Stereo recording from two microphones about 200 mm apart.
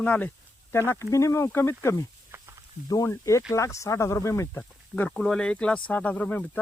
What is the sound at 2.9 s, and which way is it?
Speech, 15° left (ahead or behind).